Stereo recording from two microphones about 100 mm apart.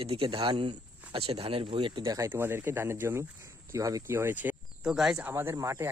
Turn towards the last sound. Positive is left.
turn(degrees=-30)  # may be behind; listen again after turning